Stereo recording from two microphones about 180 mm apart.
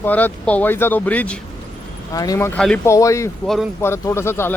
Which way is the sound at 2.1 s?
20° left (ahead or behind).